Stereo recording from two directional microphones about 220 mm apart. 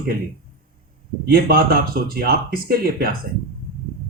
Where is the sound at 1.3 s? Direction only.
40° right (ahead or behind).